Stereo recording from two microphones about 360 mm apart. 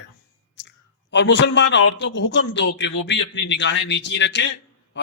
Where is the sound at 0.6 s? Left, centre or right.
Left.